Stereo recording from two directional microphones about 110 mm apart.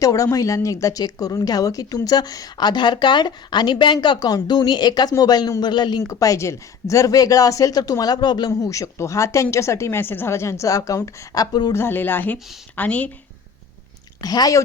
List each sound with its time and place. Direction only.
0.0 s speech: 30° left (ahead or behind)
6.1 s speech: 30° left (ahead or behind)
11.7 s a woman's voice: 20° left (ahead or behind)
14.2 s speech: 35° left (ahead or behind)